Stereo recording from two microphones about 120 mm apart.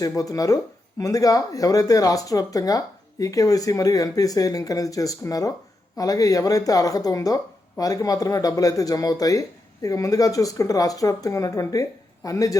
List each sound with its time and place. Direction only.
0.2 s speech: 30° left (ahead or behind)